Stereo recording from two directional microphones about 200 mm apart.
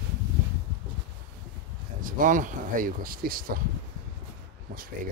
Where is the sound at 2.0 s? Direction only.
40° right (ahead or behind).